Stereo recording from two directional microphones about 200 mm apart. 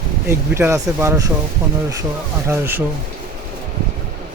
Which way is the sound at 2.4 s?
10° right (ahead or behind).